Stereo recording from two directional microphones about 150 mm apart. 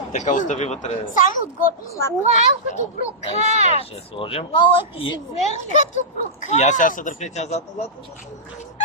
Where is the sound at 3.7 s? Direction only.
40° left (ahead or behind).